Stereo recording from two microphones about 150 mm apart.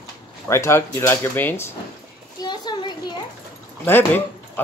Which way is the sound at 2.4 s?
30° left (ahead or behind).